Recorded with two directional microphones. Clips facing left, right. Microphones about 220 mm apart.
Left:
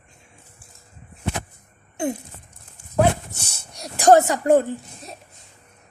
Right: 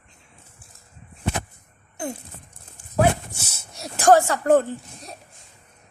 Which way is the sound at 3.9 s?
20° left (ahead or behind).